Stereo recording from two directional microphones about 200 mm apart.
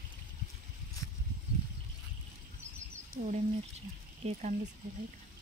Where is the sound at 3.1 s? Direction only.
35° right (ahead or behind).